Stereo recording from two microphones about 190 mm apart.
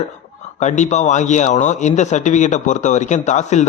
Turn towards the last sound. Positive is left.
turn(degrees=40)  # may be behind; listen again after turning